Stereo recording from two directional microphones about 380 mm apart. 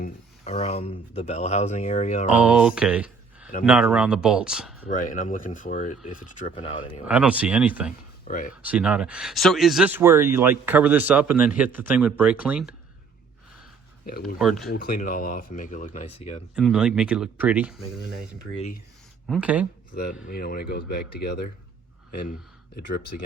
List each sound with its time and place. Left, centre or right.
0.0 s speech: centre
2.3 s a sound: centre
3.6 s speech: centre
4.9 s speech: left
7.0 s speech: centre
8.3 s speech: left
8.6 s speech: centre
14.3 s speech: centre
14.7 s speech: left
16.6 s speech: centre
19.3 s speech: centre
19.9 s speech: left